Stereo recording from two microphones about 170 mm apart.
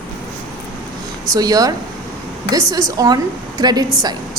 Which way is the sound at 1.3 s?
20° right (ahead or behind).